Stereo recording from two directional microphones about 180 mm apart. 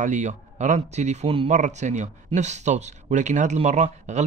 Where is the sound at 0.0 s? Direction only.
40° right (ahead or behind).